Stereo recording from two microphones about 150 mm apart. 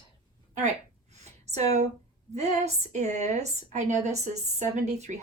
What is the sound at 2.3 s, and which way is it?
A woman's voice, 50° right (ahead or behind).